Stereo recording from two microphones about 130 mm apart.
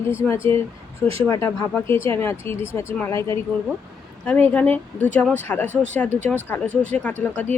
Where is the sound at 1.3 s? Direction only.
20° left (ahead or behind).